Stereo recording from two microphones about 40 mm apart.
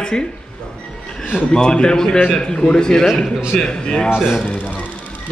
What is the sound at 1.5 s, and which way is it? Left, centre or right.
A man's voice, centre.